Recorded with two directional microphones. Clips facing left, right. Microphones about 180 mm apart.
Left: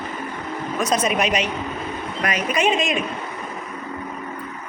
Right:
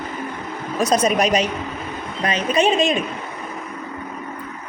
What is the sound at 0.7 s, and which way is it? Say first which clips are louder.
Speech: right 4 dB; 35° right (ahead or behind).